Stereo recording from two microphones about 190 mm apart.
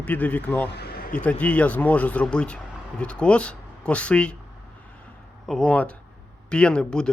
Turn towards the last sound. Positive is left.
turn(degrees=5)  # may be behind; listen again after turning